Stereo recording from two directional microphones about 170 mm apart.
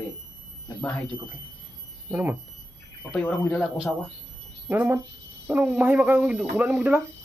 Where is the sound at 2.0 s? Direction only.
10° right (ahead or behind).